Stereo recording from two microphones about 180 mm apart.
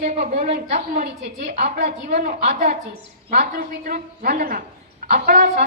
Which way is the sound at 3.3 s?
50° right (ahead or behind).